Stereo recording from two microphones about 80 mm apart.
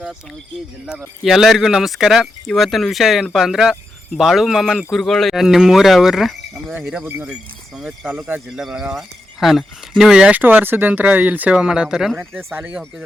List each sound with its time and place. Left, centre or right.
0.9 s speech: centre
8.0 s speech: right
8.4 s speech: centre
9.4 s speech: centre
10.4 s speech: right; by 12.2 s centre
12.5 s speech: centre